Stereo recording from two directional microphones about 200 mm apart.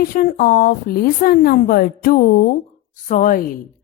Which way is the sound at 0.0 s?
45° left (ahead or behind).